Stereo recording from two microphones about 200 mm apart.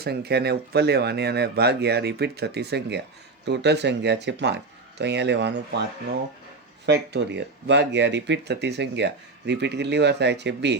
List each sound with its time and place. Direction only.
0.0 s speech: 55° right (ahead or behind)
6.8 s speech: 60° right (ahead or behind)